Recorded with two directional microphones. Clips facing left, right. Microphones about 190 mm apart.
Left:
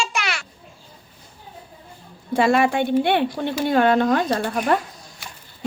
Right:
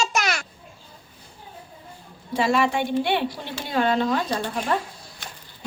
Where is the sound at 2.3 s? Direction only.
55° left (ahead or behind).